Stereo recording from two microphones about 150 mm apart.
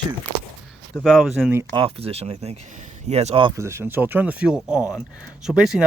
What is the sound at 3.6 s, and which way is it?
Speech, 15° right (ahead or behind).